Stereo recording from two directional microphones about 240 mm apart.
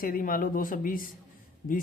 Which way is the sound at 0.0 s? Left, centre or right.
Left.